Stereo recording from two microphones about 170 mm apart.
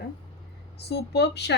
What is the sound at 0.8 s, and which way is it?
Speech, 75° left (ahead or behind).